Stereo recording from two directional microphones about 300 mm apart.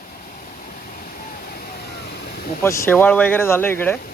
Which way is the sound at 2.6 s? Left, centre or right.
Centre.